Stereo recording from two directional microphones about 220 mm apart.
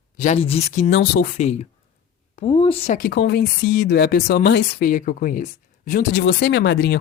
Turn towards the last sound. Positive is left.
turn(degrees=45)  # may be behind; listen again after turning